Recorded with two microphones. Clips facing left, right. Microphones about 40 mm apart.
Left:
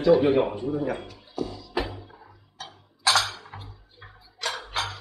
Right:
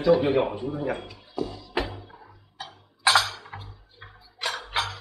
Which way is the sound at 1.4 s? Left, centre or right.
Right.